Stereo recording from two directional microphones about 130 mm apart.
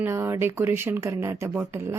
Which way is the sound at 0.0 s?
20° right (ahead or behind).